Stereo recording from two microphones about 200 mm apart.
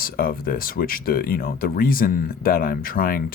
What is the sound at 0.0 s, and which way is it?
Speech, 45° left (ahead or behind).